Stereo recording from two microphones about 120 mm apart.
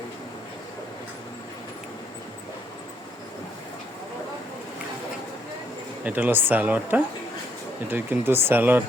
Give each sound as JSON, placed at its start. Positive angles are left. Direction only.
{"t": 6.1, "sound": "speech", "side_deg": -15}